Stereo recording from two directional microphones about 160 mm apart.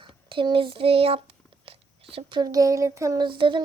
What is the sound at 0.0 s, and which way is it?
Speech, 30° right (ahead or behind).